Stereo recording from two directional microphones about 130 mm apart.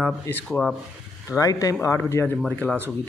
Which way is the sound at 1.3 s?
25° left (ahead or behind).